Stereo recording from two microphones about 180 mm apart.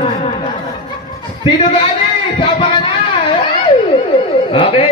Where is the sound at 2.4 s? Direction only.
30° left (ahead or behind).